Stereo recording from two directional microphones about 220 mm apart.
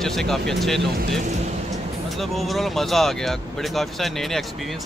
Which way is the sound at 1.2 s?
35° right (ahead or behind).